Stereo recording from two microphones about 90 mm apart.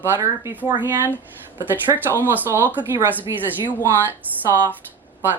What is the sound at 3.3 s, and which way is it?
Speech, 35° right (ahead or behind).